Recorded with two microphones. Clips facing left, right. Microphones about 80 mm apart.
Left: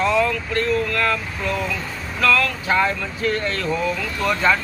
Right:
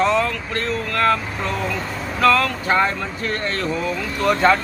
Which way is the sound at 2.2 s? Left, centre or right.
Right.